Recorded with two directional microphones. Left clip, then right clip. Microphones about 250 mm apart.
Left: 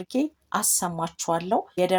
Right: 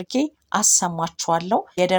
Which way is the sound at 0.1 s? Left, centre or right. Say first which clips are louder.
Right 4 dB; centre.